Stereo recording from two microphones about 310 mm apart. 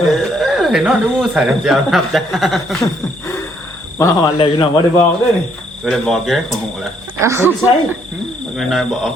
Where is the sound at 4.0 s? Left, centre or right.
Centre.